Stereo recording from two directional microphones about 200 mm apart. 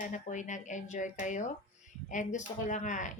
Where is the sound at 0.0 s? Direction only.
40° left (ahead or behind).